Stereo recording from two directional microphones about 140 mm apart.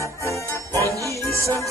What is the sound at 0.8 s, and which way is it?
Music, 20° right (ahead or behind).